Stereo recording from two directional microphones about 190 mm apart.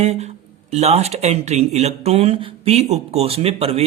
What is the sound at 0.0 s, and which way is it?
Speech, 35° right (ahead or behind).